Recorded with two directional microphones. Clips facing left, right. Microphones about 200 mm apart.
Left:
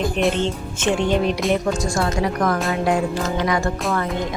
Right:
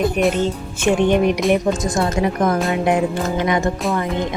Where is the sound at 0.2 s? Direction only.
5° right (ahead or behind).